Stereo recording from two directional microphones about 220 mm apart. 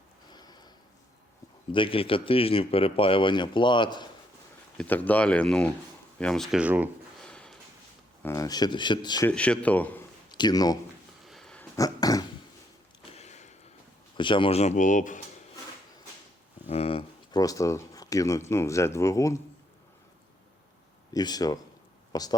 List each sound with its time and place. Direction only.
0.3 s a sound: 20° left (ahead or behind)
1.7 s speech: 25° left (ahead or behind)
4.8 s speech: 10° left (ahead or behind)
7.3 s a sound: 5° left (ahead or behind)
8.2 s speech: 15° left (ahead or behind)
9.3 s speech: 5° left (ahead or behind)
10.3 s speech: 20° left (ahead or behind)
11.3 s a sound: centre (ahead or behind)
11.8 s dog: 15° left (ahead or behind)
13.0 s a sound: 30° left (ahead or behind)
14.2 s speech: 20° left (ahead or behind)
16.6 s speech: 25° left (ahead or behind)
21.1 s speech: 20° left (ahead or behind)